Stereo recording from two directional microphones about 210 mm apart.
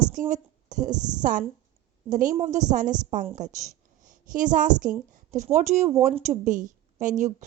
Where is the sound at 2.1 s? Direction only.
40° right (ahead or behind).